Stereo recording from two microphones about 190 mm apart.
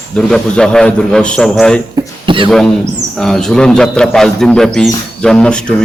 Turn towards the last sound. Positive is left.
turn(degrees=5)  # may be behind; listen again after turning